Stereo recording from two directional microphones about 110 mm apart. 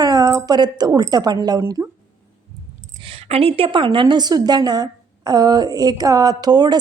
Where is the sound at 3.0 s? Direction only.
60° right (ahead or behind).